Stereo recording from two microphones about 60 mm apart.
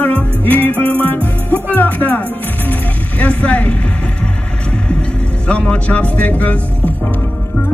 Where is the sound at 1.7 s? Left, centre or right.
Left.